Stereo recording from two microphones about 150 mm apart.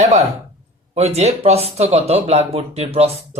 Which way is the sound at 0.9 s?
45° right (ahead or behind).